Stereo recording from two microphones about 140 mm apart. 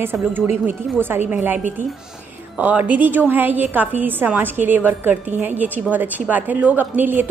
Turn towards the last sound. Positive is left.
turn(degrees=-15)  # may be behind; listen again after turning